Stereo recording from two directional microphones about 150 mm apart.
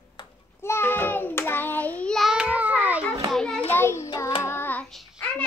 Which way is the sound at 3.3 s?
5° left (ahead or behind).